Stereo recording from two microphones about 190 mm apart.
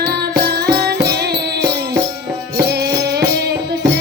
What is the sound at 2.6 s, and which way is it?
Music, 60° right (ahead or behind).